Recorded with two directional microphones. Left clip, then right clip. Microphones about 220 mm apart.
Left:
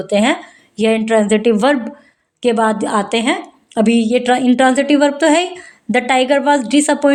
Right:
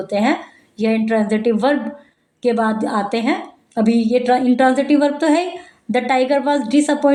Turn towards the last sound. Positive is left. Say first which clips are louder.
# left 2 dB
turn(degrees=40)  # may be behind; listen again after turning